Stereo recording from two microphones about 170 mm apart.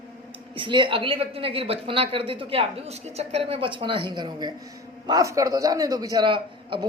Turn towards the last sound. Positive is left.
turn(degrees=-30)  # may be behind; listen again after turning